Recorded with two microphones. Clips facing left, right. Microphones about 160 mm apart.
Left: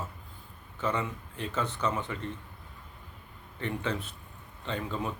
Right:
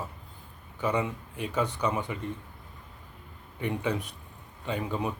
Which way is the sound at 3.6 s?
15° right (ahead or behind).